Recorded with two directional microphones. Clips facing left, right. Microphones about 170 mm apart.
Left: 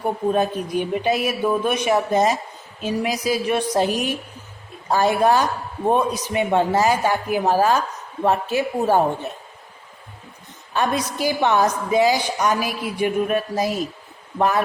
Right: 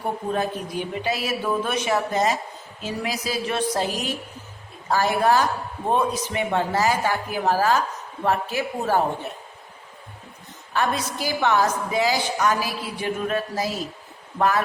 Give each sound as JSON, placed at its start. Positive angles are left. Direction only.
{"t": 0.3, "sound": "a woman's voice", "side_deg": 20}
{"t": 10.8, "sound": "a woman's voice", "side_deg": 20}